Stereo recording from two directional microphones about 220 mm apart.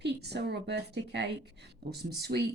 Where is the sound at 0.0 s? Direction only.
50° right (ahead or behind).